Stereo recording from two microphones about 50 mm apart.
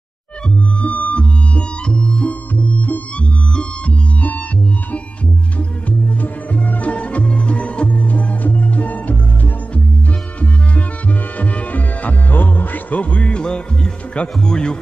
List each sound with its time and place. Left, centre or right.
0.7 s music: left
3.5 s organ: left
5.6 s music: left
14.1 s speech: centre